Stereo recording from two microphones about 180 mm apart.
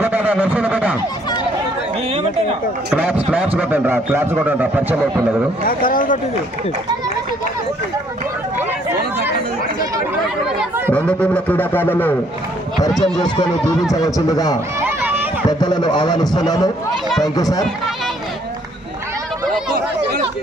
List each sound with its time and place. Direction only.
0.0 s a sound: 10° right (ahead or behind)
2.9 s speech: 10° right (ahead or behind)
5.6 s speech: 50° left (ahead or behind)
10.9 s music: 5° left (ahead or behind)
12.9 s speech: centre (ahead or behind)
13.2 s a man's voice: 25° left (ahead or behind)
14.8 s a sound: 10° right (ahead or behind)
15.4 s a man's voice: 25° left (ahead or behind)